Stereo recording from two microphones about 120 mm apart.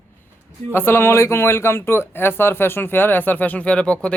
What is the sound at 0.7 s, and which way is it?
Speech, 20° left (ahead or behind).